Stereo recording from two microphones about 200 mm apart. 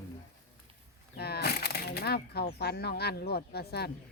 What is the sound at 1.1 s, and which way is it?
Speech, 55° left (ahead or behind).